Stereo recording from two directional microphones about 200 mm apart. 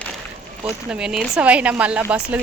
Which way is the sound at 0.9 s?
5° right (ahead or behind).